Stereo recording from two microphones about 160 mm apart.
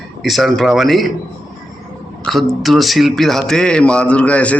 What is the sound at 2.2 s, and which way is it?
Speech, centre (ahead or behind).